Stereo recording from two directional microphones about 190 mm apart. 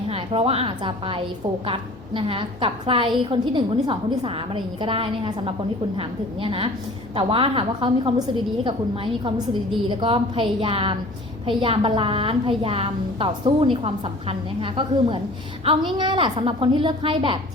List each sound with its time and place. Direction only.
0.1 s a woman's voice: 30° right (ahead or behind)
9.9 s a woman's voice: 25° right (ahead or behind)